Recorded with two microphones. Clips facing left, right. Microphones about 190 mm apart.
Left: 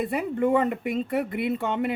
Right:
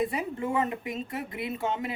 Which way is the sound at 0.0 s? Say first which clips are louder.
Left 5 dB; 60° left (ahead or behind).